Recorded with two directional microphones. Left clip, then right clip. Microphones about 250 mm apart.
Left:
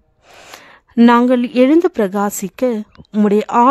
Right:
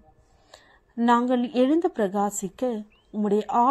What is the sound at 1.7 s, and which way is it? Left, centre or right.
Speech, left.